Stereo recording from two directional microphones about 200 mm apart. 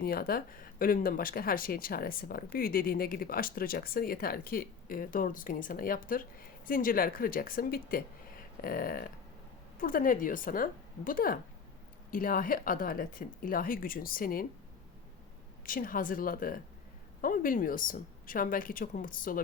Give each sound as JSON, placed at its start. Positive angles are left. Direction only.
{"t": 0.0, "sound": "speech", "side_deg": 50}
{"t": 15.6, "sound": "speech", "side_deg": 45}